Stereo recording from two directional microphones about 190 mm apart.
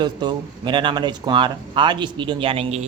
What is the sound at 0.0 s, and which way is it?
Speech, 25° right (ahead or behind).